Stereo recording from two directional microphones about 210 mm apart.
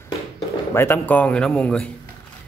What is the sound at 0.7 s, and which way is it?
Speech, 10° left (ahead or behind).